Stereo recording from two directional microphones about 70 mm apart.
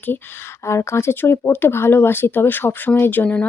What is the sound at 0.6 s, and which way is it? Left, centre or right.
Speech, left.